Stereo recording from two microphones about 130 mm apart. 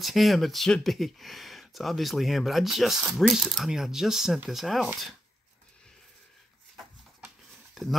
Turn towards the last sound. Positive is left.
turn(degrees=0)  # may be behind; listen again after turning